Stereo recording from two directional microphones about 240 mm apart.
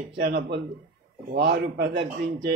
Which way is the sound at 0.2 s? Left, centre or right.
Right.